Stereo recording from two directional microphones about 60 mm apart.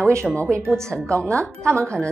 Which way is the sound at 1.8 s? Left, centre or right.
Centre.